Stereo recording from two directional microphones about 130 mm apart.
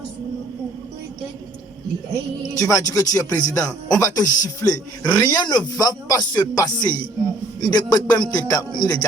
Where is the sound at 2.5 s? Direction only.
25° left (ahead or behind).